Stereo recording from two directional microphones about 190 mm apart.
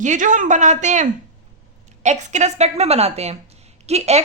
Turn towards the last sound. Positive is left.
turn(degrees=-35)  # may be behind; listen again after turning